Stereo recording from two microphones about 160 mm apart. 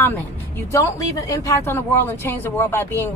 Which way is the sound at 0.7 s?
20° left (ahead or behind).